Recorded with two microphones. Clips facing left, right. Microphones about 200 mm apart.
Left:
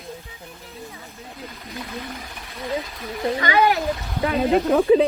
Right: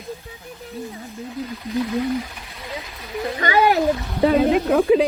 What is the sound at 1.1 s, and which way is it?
Speech, centre (ahead or behind).